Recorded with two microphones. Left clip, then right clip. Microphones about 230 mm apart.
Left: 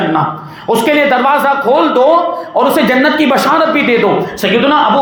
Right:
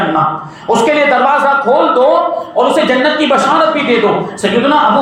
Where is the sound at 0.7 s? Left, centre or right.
Left.